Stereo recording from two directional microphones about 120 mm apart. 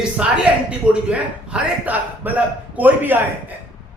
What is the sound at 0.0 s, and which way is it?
A man's voice, 10° right (ahead or behind).